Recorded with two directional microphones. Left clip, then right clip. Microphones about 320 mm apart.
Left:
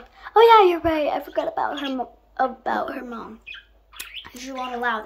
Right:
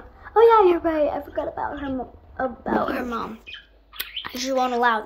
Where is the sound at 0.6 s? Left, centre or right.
Centre.